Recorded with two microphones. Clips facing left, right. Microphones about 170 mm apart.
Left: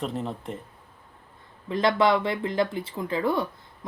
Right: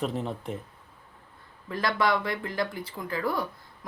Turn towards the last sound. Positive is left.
turn(degrees=25)  # may be behind; listen again after turning